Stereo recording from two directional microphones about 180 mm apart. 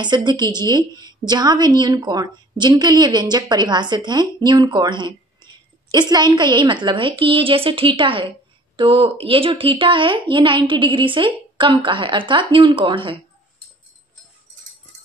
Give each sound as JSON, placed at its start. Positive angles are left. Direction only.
{"t": 0.0, "sound": "a woman's voice", "side_deg": -25}